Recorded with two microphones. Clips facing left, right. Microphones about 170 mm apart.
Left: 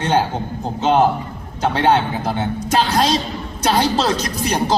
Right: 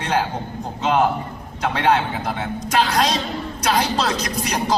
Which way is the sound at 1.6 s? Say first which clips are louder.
Left 3 dB; 30° left (ahead or behind).